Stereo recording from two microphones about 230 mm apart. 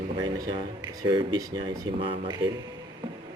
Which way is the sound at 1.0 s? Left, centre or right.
Centre.